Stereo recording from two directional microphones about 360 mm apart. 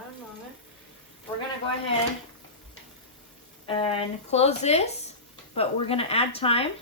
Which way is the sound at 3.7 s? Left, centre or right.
Centre.